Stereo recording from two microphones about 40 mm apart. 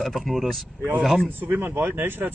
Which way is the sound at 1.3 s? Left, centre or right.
Right.